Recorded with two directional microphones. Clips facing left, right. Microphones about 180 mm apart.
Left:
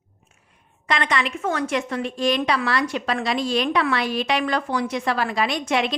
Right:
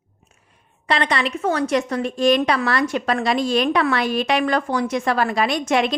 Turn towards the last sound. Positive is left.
turn(degrees=-45)  # may be behind; listen again after turning